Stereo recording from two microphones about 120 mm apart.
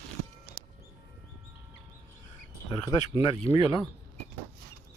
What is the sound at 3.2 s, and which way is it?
Speech, 50° left (ahead or behind).